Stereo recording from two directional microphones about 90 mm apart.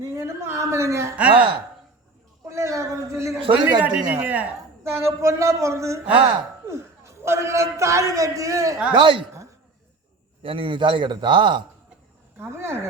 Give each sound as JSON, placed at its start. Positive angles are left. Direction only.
{"t": 0.0, "sound": "speech", "side_deg": -30}
{"t": 1.1, "sound": "speech", "side_deg": -15}
{"t": 2.5, "sound": "speech", "side_deg": -35}
{"t": 3.5, "sound": "speech", "side_deg": -15}
{"t": 4.8, "sound": "a man's voice", "side_deg": -30}
{"t": 9.0, "sound": "a man's voice", "side_deg": -70}
{"t": 10.4, "sound": "a man's voice", "side_deg": -80}
{"t": 12.4, "sound": "speech", "side_deg": -30}